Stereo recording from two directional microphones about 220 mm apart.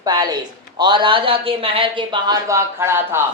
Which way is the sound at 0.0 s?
15° right (ahead or behind).